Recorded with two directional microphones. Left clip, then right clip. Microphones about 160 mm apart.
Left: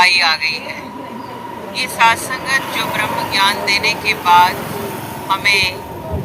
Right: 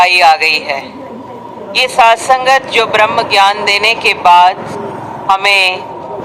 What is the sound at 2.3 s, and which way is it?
Speech, 15° left (ahead or behind).